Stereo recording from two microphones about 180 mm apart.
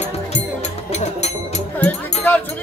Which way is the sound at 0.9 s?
40° left (ahead or behind).